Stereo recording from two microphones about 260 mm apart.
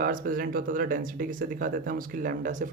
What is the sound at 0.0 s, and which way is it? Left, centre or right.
Speech, right.